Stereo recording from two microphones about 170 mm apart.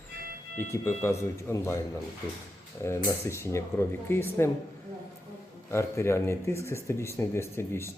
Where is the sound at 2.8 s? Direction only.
15° left (ahead or behind).